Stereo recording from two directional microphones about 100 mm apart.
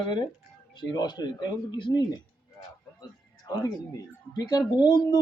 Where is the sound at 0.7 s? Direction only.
50° left (ahead or behind).